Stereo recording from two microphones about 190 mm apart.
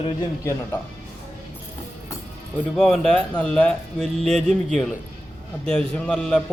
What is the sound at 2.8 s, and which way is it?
A man's voice, centre (ahead or behind).